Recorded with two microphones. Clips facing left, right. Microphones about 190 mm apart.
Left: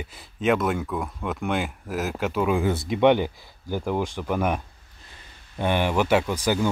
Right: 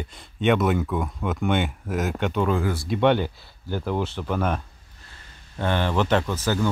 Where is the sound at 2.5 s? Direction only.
20° left (ahead or behind).